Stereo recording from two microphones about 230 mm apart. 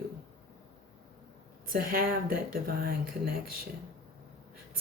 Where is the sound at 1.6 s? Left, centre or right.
Right.